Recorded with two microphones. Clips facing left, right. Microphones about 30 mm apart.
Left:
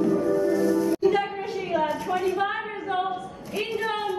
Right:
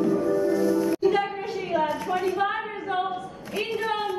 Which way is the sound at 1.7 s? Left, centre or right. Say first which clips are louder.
Even; centre.